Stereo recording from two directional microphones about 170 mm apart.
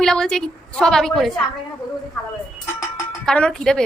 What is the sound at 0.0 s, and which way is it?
A woman's voice, 5° left (ahead or behind).